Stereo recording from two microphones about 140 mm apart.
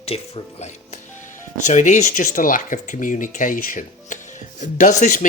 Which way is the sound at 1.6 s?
60° left (ahead or behind).